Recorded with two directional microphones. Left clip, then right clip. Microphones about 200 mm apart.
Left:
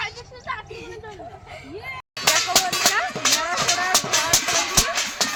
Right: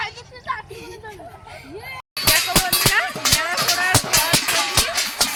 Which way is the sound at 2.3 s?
Centre (ahead or behind).